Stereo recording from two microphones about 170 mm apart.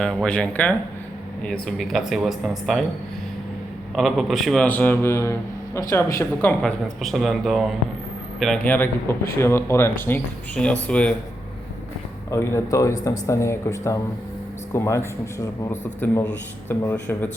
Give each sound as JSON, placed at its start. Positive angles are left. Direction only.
{"t": 0.0, "sound": "speech", "side_deg": 5}
{"t": 3.9, "sound": "a man's voice", "side_deg": 0}
{"t": 6.6, "sound": "a man's voice", "side_deg": 0}
{"t": 12.3, "sound": "a man's voice", "side_deg": 15}